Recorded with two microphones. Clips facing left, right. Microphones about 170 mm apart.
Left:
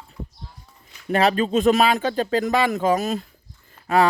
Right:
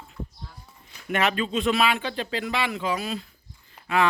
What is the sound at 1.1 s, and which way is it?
Speech, 35° left (ahead or behind).